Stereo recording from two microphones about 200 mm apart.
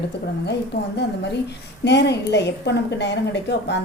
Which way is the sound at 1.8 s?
60° left (ahead or behind).